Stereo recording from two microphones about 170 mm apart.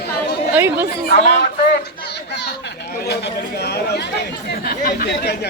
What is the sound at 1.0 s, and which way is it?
Speech, 70° left (ahead or behind).